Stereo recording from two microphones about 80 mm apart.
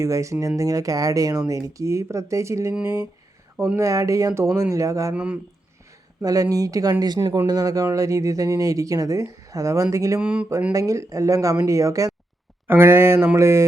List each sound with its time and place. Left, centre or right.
0.0 s speech: right
3.8 s speech: right
5.1 s speech: centre
6.2 s speech: right
7.0 s speech: right
10.2 s speech: centre
10.7 s speech: right
12.6 s speech: right